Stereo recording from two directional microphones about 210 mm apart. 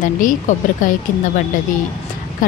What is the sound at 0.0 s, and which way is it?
Speech, 40° left (ahead or behind).